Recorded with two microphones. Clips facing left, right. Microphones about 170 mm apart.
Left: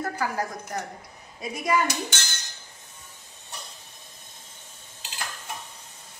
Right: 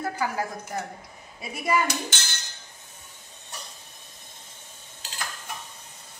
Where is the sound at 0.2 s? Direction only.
5° right (ahead or behind).